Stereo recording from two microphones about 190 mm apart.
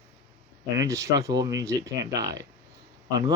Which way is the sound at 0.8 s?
15° right (ahead or behind).